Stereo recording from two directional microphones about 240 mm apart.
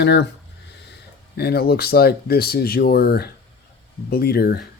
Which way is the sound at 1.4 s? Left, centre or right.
Left.